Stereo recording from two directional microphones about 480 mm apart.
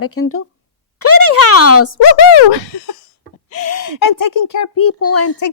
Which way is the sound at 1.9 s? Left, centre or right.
Left.